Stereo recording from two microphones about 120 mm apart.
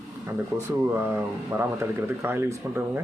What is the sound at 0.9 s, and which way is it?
Speech, 20° right (ahead or behind).